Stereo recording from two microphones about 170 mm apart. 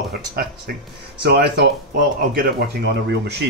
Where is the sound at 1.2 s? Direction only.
70° right (ahead or behind).